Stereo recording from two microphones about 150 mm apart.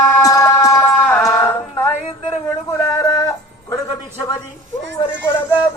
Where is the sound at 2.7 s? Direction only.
25° left (ahead or behind).